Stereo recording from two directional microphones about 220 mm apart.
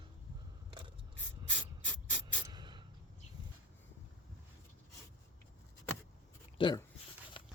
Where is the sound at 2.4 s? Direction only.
20° right (ahead or behind).